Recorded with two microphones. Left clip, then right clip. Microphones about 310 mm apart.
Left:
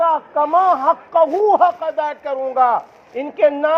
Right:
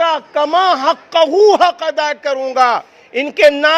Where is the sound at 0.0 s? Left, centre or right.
Right.